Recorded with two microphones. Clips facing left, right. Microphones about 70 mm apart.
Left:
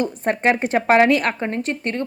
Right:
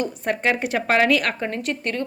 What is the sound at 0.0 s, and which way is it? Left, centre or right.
A woman's voice, left.